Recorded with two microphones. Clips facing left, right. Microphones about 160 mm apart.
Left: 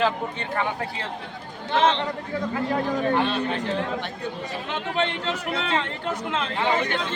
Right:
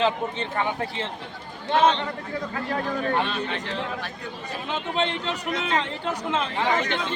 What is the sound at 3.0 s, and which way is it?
Speech, 25° left (ahead or behind).